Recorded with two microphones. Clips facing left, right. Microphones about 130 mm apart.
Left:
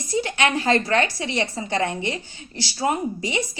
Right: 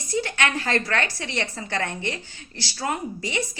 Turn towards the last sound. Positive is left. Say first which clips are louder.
# left 3 dB
turn(degrees=20)  # may be behind; listen again after turning